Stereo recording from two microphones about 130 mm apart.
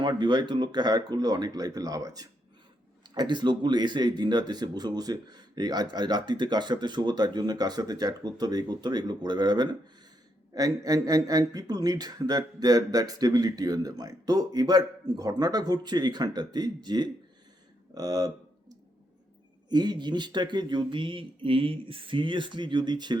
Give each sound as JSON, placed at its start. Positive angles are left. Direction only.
{"t": 0.0, "sound": "speech", "side_deg": -35}
{"t": 19.7, "sound": "speech", "side_deg": -35}